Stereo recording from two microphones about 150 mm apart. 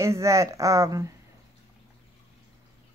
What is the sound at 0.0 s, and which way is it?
Speech, 20° right (ahead or behind).